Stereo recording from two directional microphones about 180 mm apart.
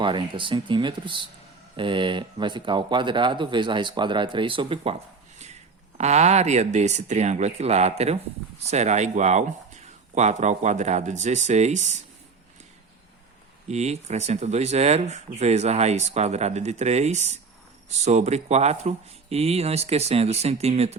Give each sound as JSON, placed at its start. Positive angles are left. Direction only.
{"t": 0.0, "sound": "speech", "side_deg": -25}
{"t": 6.0, "sound": "speech", "side_deg": -40}
{"t": 13.7, "sound": "speech", "side_deg": -35}